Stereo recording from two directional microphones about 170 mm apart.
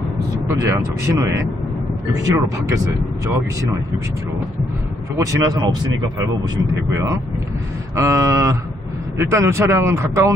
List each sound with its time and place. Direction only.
0.5 s speech: 15° right (ahead or behind)
5.1 s speech: 20° right (ahead or behind)
6.9 s speech: 20° right (ahead or behind)